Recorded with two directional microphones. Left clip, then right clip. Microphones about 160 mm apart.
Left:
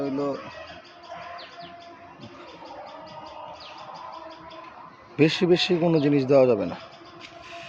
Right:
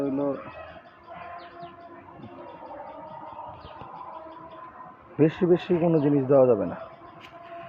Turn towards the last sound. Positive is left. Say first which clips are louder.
# left 1 dB
turn(degrees=30)  # may be behind; listen again after turning